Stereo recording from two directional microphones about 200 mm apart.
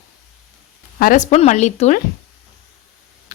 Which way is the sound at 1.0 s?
40° left (ahead or behind).